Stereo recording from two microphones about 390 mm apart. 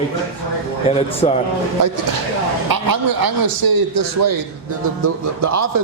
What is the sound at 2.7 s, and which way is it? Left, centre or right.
A man's voice, right.